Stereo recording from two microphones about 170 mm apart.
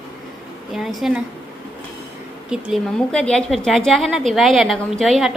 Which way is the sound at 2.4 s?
5° right (ahead or behind).